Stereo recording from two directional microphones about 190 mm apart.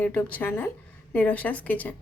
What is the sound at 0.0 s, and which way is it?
A woman's voice, 10° left (ahead or behind).